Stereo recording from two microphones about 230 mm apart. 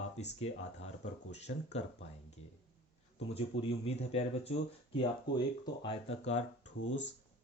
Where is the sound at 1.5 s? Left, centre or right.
Left.